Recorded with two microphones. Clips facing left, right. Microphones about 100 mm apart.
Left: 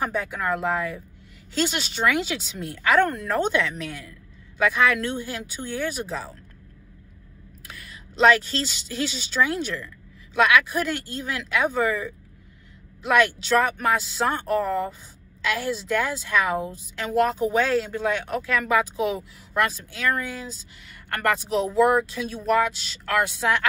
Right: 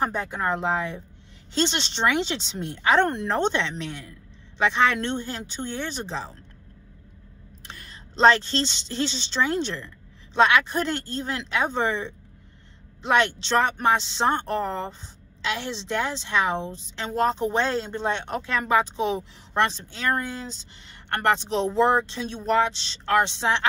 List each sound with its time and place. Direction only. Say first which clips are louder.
0.0 s speech: right 1 dB; 30° right (ahead or behind)
1.7 s a woman's voice: even; 10° left (ahead or behind)
2.2 s speech: even; 30° right (ahead or behind)
7.6 s a woman's voice: even; 35° right (ahead or behind)
16.6 s a woman's voice: left 1 dB; 5° left (ahead or behind)
16.9 s speech: left 2 dB; 30° right (ahead or behind)